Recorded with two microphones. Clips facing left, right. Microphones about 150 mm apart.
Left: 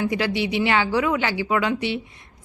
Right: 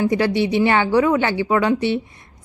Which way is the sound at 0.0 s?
45° right (ahead or behind).